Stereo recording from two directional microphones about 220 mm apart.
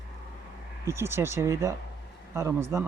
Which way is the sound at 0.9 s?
10° right (ahead or behind).